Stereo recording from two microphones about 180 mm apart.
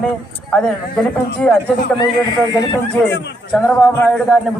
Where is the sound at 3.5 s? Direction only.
5° left (ahead or behind).